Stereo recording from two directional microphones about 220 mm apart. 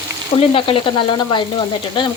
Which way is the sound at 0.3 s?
25° left (ahead or behind).